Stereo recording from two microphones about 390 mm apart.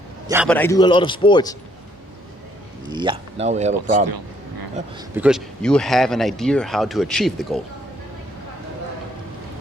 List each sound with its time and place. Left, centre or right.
0.3 s a man's voice: centre
2.9 s speech: centre
4.9 s speech: centre